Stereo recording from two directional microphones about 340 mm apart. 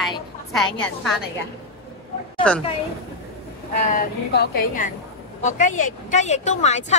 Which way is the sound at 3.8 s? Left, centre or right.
Left.